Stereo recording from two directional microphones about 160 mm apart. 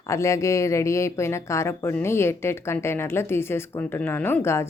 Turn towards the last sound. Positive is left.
turn(degrees=15)  # may be behind; listen again after turning